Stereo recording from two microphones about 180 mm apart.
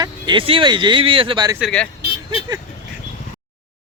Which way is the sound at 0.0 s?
25° right (ahead or behind).